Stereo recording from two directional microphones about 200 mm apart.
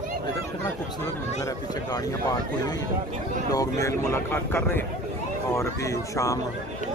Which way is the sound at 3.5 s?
15° left (ahead or behind).